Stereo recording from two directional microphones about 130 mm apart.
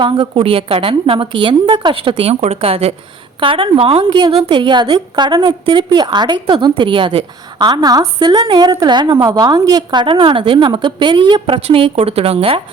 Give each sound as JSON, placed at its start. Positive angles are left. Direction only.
{"t": 0.0, "sound": "a woman's voice", "side_deg": -40}
{"t": 7.7, "sound": "a woman's voice", "side_deg": -30}